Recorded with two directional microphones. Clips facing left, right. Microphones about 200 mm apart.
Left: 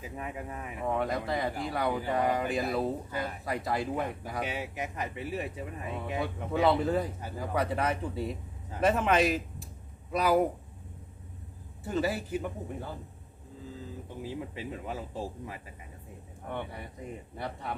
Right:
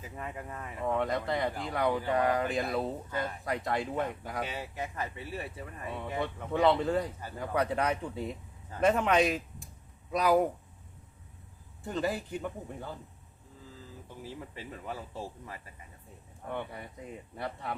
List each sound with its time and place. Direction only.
0.0 s speech: 10° left (ahead or behind)
0.9 s speech: centre (ahead or behind)
4.4 s speech: 15° left (ahead or behind)
6.1 s speech: 5° left (ahead or behind)
11.9 s speech: 5° left (ahead or behind)
14.2 s speech: 15° left (ahead or behind)
16.5 s speech: centre (ahead or behind)